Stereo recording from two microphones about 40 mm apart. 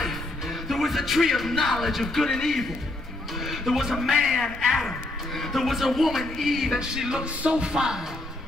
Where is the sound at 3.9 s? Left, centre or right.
Centre.